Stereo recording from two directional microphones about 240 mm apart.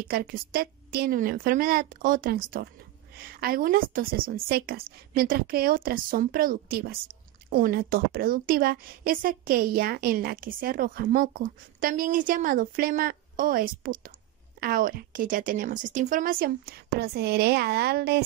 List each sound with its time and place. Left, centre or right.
0.1 s a woman's voice: right